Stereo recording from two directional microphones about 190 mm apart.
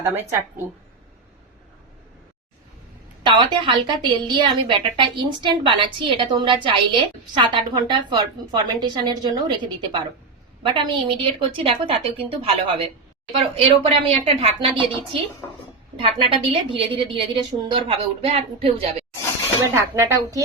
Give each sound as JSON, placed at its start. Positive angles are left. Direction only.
{"t": 0.0, "sound": "a woman's voice", "side_deg": -15}
{"t": 3.2, "sound": "a woman's voice", "side_deg": -25}
{"t": 10.6, "sound": "a woman's voice", "side_deg": -25}
{"t": 20.0, "sound": "a woman's voice", "side_deg": -15}